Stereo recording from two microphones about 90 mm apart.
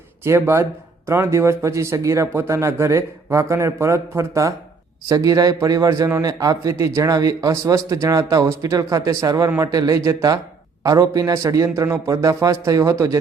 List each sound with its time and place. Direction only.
0.3 s speech: 30° right (ahead or behind)